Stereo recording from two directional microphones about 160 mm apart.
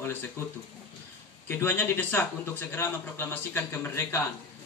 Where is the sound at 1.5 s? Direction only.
15° left (ahead or behind).